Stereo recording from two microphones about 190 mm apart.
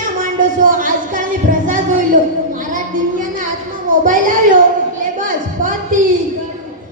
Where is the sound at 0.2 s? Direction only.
45° right (ahead or behind).